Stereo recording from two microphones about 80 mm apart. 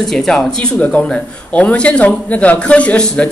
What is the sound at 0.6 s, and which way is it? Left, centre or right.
A woman's voice, centre.